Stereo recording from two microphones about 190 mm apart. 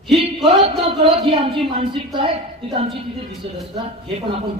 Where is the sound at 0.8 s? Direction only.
30° right (ahead or behind).